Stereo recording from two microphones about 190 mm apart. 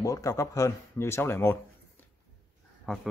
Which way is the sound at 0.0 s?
15° left (ahead or behind).